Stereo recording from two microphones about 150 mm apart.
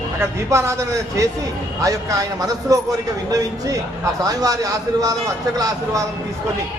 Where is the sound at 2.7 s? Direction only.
25° right (ahead or behind).